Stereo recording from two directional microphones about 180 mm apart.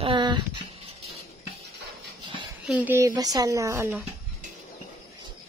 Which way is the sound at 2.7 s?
10° right (ahead or behind).